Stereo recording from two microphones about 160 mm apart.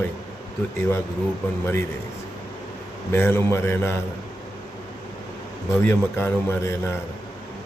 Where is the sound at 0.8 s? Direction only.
15° left (ahead or behind).